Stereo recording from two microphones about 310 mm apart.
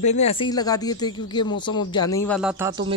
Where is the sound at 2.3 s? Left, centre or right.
Centre.